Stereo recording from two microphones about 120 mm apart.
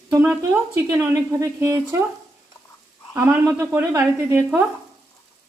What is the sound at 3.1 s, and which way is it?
Speech, 20° right (ahead or behind).